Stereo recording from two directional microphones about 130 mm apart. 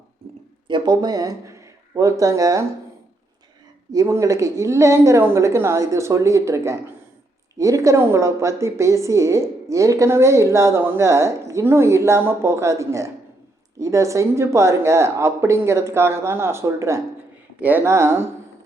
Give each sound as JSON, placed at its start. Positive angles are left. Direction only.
{"t": 0.7, "sound": "speech", "side_deg": -30}
{"t": 3.9, "sound": "a woman's voice", "side_deg": -25}